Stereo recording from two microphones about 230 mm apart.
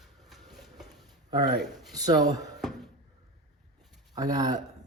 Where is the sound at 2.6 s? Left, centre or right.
Centre.